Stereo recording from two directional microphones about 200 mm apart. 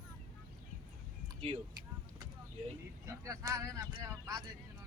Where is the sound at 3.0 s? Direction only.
15° right (ahead or behind).